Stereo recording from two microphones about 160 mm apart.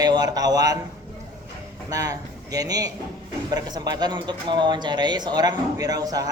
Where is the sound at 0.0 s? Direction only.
25° right (ahead or behind).